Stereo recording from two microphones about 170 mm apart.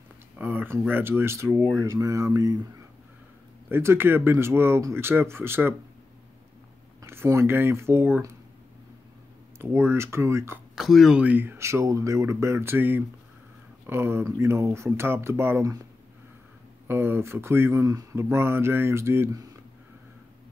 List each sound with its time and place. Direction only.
0.4 s speech: 10° right (ahead or behind)
3.6 s speech: 15° right (ahead or behind)
7.0 s speech: 15° right (ahead or behind)
9.6 s speech: 15° right (ahead or behind)
10.8 s speech: centre (ahead or behind); by 15.8 s 15° right (ahead or behind)
16.8 s speech: 15° right (ahead or behind)